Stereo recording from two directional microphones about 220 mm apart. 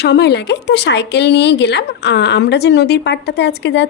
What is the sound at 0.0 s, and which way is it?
Speech, 50° left (ahead or behind).